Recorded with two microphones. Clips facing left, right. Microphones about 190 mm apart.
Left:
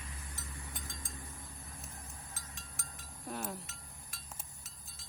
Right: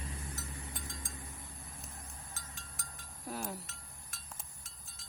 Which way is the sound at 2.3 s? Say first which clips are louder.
Even; centre (ahead or behind).